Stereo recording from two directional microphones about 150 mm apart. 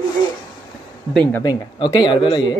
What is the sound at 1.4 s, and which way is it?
Speech, 25° left (ahead or behind).